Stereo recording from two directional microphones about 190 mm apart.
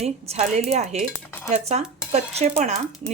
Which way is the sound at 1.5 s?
35° right (ahead or behind).